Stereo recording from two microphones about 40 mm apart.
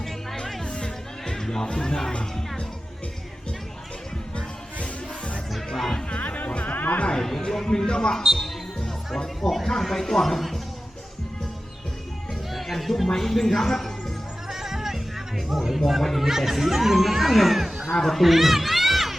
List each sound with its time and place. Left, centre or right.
0.0 s music: centre
0.6 s music: left
4.4 s music: left
5.5 s music: centre
6.1 s music: left
7.3 s speech: centre
7.9 s a man's voice: left
9.1 s speech: centre
12.3 s music: centre
13.1 s speech: centre
14.5 s music: centre
15.4 s speech: centre